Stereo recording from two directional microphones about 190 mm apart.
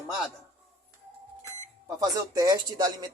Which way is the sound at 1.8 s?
20° right (ahead or behind).